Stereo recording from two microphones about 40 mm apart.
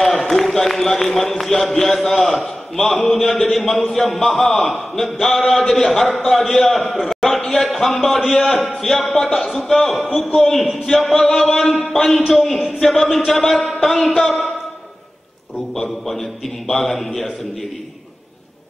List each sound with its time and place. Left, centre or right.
0.1 s a man's voice: centre
3.5 s a sound: centre
4.1 s a man's voice: centre
8.3 s a man's voice: centre
8.6 s a man's voice: centre
10.0 s a sound: centre
11.9 s a man's voice: centre
12.5 s speech: centre
12.8 s a man's voice: centre
16.1 s a man's voice: centre